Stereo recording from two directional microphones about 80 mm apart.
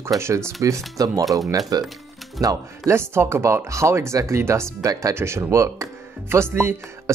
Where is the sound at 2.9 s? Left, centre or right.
Right.